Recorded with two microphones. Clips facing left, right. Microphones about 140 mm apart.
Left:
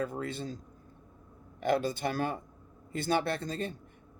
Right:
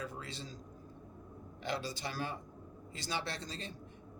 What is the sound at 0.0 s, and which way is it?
Speech, 50° left (ahead or behind).